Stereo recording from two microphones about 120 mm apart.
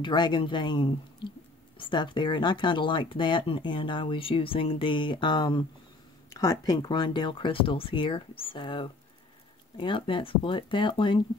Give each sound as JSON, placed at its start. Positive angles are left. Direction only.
{"t": 0.0, "sound": "speech", "side_deg": 40}
{"t": 6.3, "sound": "speech", "side_deg": 30}